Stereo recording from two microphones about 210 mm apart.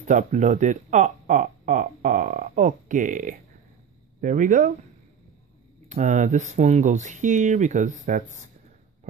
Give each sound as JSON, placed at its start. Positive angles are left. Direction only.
{"t": 0.0, "sound": "speech", "side_deg": -35}
{"t": 5.9, "sound": "speech", "side_deg": -35}